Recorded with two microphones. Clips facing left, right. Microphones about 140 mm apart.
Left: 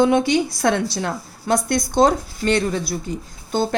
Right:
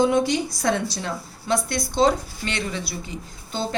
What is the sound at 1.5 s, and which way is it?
Speech, 45° left (ahead or behind).